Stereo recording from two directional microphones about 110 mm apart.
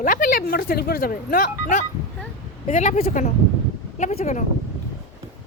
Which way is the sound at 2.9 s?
75° left (ahead or behind).